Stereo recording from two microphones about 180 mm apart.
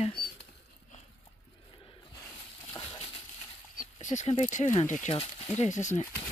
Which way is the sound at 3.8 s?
40° left (ahead or behind).